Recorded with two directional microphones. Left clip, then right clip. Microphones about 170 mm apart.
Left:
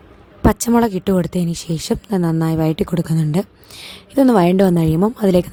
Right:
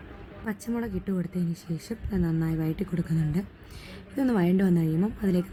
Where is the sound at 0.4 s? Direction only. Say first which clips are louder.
Left 18 dB; 55° left (ahead or behind).